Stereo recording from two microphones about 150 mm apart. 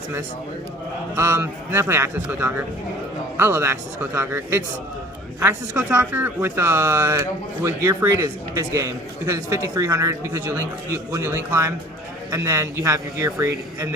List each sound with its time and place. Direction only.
1.1 s speech: 15° right (ahead or behind)